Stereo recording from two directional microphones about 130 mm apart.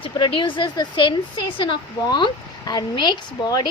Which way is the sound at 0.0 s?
40° left (ahead or behind).